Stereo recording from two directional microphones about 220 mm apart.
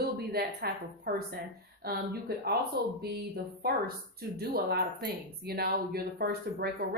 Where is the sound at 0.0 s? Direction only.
45° right (ahead or behind).